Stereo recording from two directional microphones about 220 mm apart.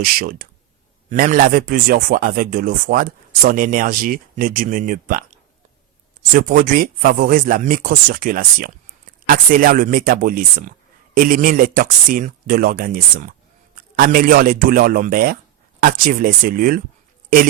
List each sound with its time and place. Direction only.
0.0 s speech: 40° right (ahead or behind)
6.3 s speech: 40° right (ahead or behind)